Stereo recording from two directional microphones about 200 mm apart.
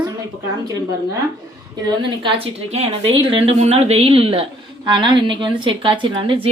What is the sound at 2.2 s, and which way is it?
A woman's voice, 30° right (ahead or behind).